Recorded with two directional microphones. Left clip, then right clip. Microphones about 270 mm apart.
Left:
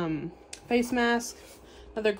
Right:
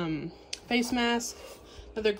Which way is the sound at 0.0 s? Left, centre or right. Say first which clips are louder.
Left 2 dB; centre.